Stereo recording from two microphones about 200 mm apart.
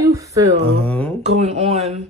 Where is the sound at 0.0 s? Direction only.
15° right (ahead or behind).